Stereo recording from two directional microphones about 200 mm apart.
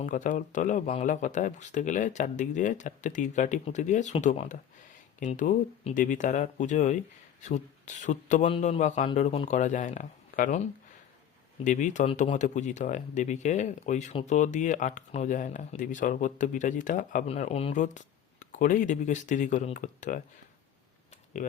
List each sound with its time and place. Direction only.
0.0 s speech: 40° left (ahead or behind)
11.6 s speech: 40° left (ahead or behind)